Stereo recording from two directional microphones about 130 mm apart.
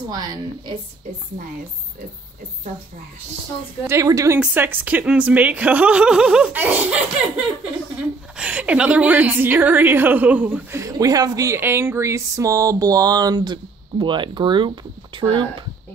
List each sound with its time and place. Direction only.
0.1 s a woman's voice: 35° right (ahead or behind)
3.8 s speech: 20° right (ahead or behind)
4.4 s speech: 15° right (ahead or behind)
8.4 s speech: 10° right (ahead or behind)
10.8 s a woman's voice: 25° right (ahead or behind)